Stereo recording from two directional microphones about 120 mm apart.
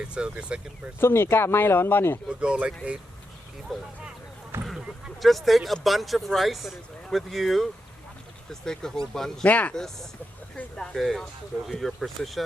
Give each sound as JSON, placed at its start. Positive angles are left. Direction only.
{"t": 0.0, "sound": "speech", "side_deg": -10}
{"t": 0.9, "sound": "speech", "side_deg": 20}
{"t": 2.4, "sound": "speech", "side_deg": -10}